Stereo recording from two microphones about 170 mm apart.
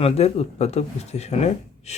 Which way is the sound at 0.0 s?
35° left (ahead or behind).